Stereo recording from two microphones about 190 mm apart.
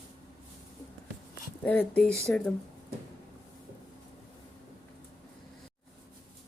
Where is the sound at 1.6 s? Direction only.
10° left (ahead or behind).